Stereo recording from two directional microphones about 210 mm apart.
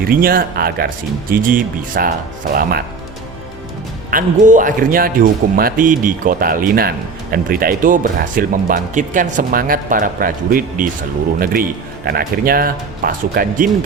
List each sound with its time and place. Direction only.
0.0 s speech: 45° right (ahead or behind)
4.1 s speech: 40° right (ahead or behind)